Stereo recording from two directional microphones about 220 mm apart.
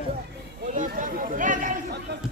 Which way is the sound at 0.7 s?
35° right (ahead or behind).